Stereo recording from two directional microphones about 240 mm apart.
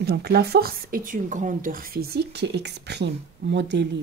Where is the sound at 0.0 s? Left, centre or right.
Right.